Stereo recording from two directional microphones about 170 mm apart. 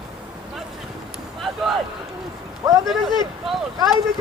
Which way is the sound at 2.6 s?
20° right (ahead or behind).